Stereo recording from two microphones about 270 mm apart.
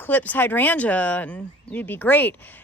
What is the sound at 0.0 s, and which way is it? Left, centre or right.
Speech, centre.